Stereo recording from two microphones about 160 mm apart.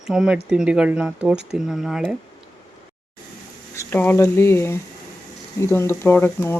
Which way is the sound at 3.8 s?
15° left (ahead or behind).